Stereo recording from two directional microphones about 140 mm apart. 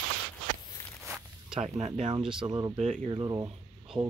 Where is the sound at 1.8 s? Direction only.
55° right (ahead or behind).